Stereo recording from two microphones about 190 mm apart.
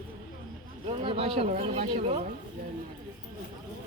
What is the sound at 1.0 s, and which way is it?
Speech, 30° right (ahead or behind).